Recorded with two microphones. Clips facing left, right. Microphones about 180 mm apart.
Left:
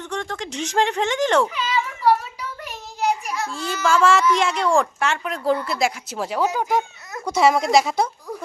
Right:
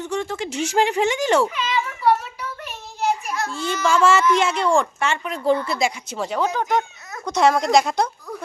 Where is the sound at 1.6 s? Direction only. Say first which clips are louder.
Even; 10° left (ahead or behind).